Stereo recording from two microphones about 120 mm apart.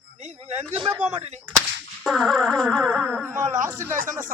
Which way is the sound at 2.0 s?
5° left (ahead or behind).